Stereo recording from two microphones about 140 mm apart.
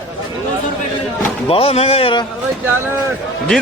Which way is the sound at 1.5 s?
45° left (ahead or behind).